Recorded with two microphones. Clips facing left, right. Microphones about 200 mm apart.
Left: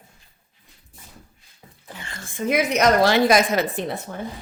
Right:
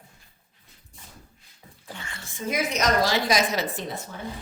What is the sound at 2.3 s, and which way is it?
A woman's voice, 65° left (ahead or behind).